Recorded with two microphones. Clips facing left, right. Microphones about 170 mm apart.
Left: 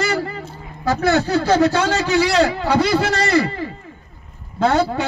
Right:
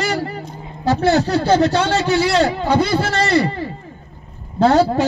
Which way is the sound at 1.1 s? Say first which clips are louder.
Even; 30° right (ahead or behind).